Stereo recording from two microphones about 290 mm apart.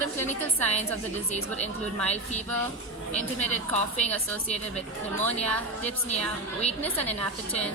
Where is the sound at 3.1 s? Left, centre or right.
Left.